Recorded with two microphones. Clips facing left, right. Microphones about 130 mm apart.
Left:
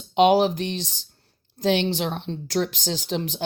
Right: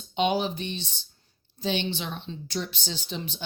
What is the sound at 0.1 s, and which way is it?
Speech, 90° left.